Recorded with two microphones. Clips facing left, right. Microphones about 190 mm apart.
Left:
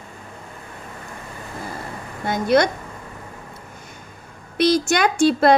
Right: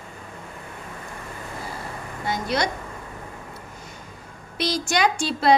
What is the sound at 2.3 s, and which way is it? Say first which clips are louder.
Speech: left 8 dB; 55° left (ahead or behind).